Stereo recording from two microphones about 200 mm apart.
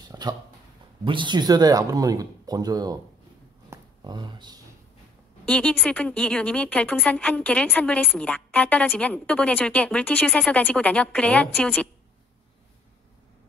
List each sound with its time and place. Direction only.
0.0 s a sound: 20° right (ahead or behind)
1.0 s speech: 25° right (ahead or behind)
5.4 s speech: 5° left (ahead or behind)